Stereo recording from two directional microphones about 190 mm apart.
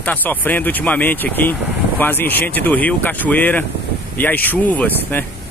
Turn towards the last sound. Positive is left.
turn(degrees=10)  # may be behind; listen again after turning